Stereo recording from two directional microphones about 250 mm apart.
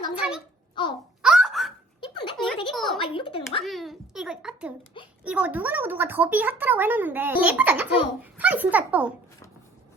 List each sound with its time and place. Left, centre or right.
0.1 s a child's voice: centre
0.8 s a woman's voice: centre
1.2 s giggle: centre
2.7 s a child's voice: centre
3.0 s a woman's voice: left
3.6 s a child's voice: centre